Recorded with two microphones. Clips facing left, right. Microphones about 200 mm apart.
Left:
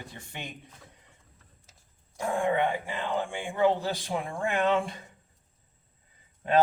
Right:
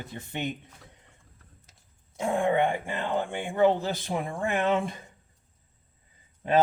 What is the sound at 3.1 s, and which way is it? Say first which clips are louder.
Speech: right 2 dB; 25° right (ahead or behind).